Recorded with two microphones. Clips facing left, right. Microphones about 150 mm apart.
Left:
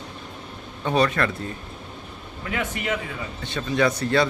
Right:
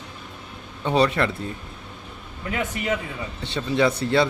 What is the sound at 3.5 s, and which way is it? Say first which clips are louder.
Speech: right 1 dB; 20° right (ahead or behind).